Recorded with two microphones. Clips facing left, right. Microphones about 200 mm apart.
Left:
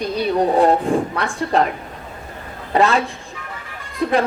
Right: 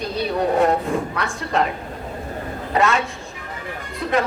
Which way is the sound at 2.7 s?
35° left (ahead or behind).